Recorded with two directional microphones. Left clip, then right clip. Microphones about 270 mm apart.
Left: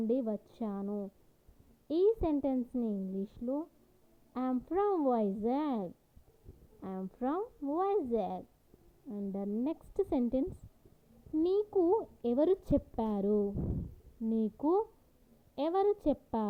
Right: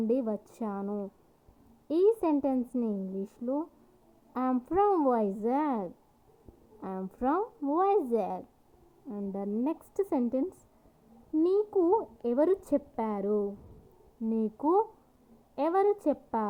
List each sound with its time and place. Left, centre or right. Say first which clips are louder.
0.1 s a woman's voice: right 2 dB; centre
14.3 s a woman's voice: right 3 dB; centre
16.0 s a woman's voice: right 3 dB; centre